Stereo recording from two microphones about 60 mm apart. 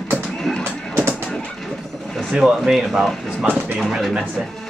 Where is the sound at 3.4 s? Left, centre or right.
Right.